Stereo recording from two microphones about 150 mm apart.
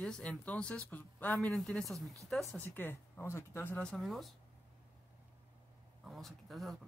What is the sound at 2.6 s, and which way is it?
Speech, 15° left (ahead or behind).